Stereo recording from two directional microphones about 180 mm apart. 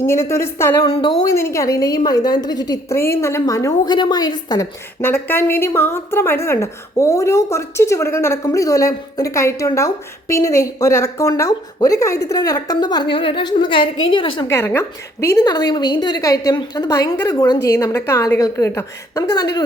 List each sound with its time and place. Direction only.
0.0 s a woman's voice: 15° left (ahead or behind)
14.4 s a woman's voice: 15° left (ahead or behind)